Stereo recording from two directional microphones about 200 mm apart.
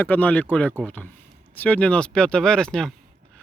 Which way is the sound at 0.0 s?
10° left (ahead or behind).